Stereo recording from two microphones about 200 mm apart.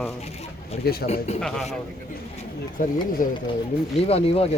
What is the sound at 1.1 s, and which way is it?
Speech, 30° left (ahead or behind).